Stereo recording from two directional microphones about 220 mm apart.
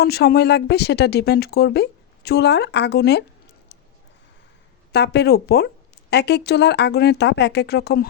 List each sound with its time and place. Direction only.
0.0 s speech: 45° left (ahead or behind)
4.9 s speech: 50° left (ahead or behind)